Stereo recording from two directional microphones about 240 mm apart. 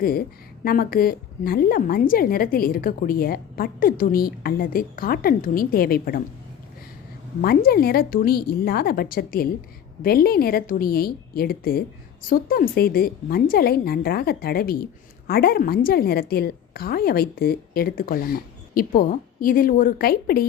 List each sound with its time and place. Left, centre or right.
0.0 s a woman's voice: left
7.4 s a woman's voice: left